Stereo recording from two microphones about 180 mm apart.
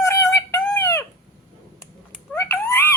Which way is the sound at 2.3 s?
15° left (ahead or behind).